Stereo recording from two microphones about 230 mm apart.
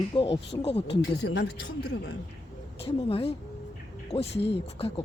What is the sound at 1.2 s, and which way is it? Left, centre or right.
Speech, left.